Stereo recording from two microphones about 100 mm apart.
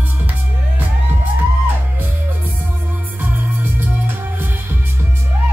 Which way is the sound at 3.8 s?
20° right (ahead or behind).